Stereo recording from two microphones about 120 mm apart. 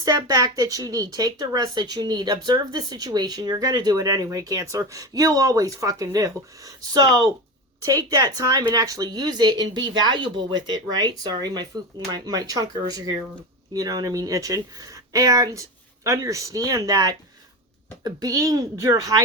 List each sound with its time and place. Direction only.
0.0 s speech: 30° right (ahead or behind)